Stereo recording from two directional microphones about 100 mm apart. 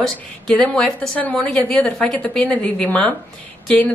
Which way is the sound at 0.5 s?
5° left (ahead or behind).